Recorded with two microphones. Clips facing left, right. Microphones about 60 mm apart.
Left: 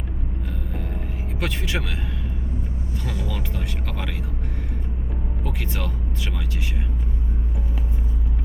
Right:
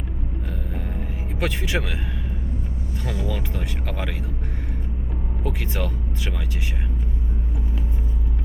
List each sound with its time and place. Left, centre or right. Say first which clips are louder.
1.4 s speech: right 2 dB; centre
3.0 s speech: right 3 dB; right
5.5 s speech: right 3 dB; centre